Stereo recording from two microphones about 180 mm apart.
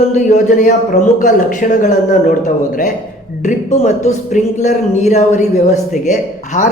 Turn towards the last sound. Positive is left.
turn(degrees=40)  # may be behind; listen again after turning